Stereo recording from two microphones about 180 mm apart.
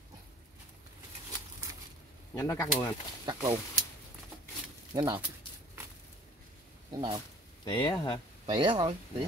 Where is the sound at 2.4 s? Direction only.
15° left (ahead or behind).